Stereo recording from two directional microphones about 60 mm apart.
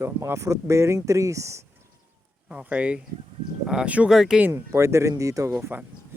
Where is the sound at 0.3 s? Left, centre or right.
Right.